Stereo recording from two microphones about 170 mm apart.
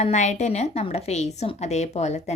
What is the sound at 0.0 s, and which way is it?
A woman's voice, 45° left (ahead or behind).